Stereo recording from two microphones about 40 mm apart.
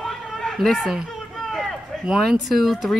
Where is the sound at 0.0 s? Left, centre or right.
Centre.